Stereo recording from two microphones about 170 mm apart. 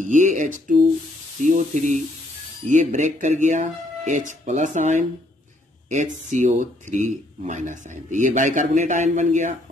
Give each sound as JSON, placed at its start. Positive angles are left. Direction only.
{"t": 0.0, "sound": "speech", "side_deg": -45}